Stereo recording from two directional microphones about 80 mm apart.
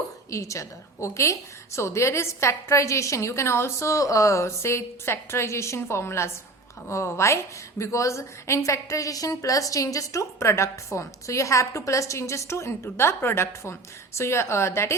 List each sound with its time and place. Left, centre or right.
0.3 s a woman's voice: left